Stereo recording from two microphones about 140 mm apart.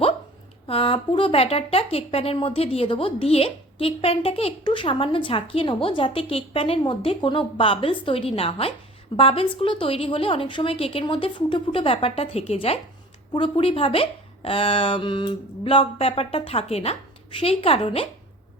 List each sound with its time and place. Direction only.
0.7 s speech: 40° left (ahead or behind)